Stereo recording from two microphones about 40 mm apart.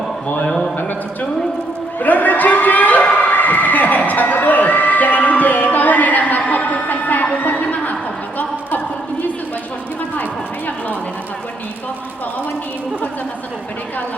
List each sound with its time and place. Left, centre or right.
2.0 s crowd: left